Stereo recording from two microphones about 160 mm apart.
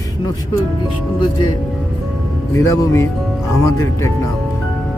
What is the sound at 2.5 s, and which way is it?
Speech, 20° left (ahead or behind).